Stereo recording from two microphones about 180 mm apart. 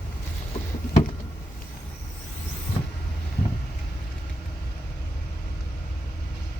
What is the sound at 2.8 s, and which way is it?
Vehicle, 45° left (ahead or behind).